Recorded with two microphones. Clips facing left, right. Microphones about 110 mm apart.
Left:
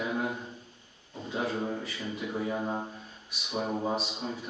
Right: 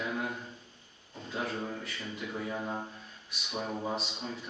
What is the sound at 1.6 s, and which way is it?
Speech, 15° left (ahead or behind).